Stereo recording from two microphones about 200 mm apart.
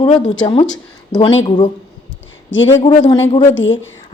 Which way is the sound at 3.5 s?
70° left (ahead or behind).